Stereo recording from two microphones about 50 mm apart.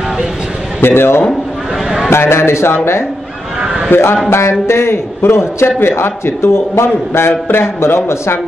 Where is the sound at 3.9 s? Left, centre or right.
Left.